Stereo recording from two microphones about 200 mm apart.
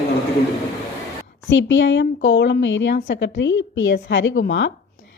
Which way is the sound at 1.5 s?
65° left (ahead or behind).